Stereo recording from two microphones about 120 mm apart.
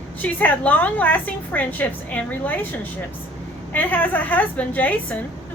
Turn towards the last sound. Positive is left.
turn(degrees=15)  # may be behind; listen again after turning